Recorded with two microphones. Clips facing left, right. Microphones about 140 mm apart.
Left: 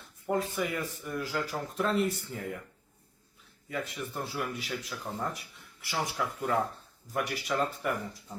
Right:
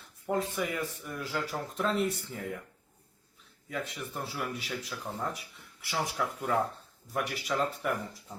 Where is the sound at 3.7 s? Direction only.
Centre (ahead or behind).